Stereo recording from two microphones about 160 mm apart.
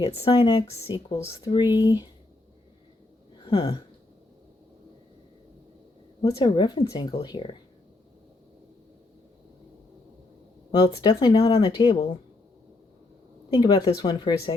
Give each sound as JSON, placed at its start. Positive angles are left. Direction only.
{"t": 0.0, "sound": "speech", "side_deg": 35}
{"t": 3.3, "sound": "a sound", "side_deg": 30}
{"t": 6.4, "sound": "speech", "side_deg": 30}
{"t": 10.7, "sound": "speech", "side_deg": 25}
{"t": 13.5, "sound": "speech", "side_deg": 30}